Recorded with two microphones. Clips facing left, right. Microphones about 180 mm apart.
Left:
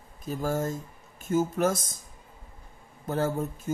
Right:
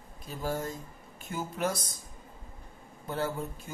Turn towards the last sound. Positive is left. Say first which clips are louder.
# left 5 dB
turn(degrees=45)  # may be behind; listen again after turning